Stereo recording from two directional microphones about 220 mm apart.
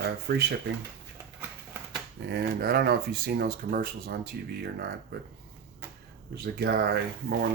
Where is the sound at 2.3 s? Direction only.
45° right (ahead or behind).